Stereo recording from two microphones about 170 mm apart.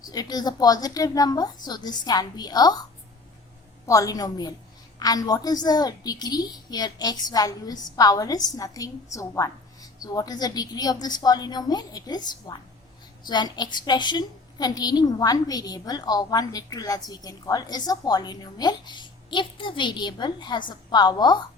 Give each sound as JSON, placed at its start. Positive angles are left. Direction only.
{"t": 0.0, "sound": "a woman's voice", "side_deg": 20}
{"t": 3.8, "sound": "a woman's voice", "side_deg": 20}